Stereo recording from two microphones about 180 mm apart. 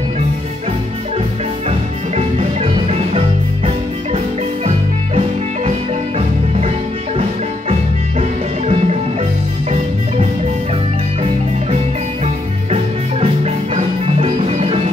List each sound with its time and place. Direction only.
1.7 s music: 35° right (ahead or behind)
8.2 s music: 35° right (ahead or behind)
12.7 s music: 35° right (ahead or behind)